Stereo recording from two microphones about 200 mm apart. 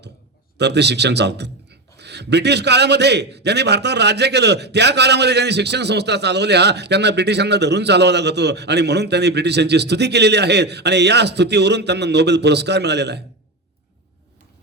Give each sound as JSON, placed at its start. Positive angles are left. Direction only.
{"t": 0.6, "sound": "a man's voice", "side_deg": -55}